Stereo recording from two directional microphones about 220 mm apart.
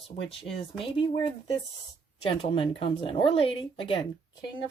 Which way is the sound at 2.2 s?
25° left (ahead or behind).